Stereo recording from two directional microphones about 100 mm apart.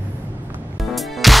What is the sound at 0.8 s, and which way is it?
Music, centre (ahead or behind).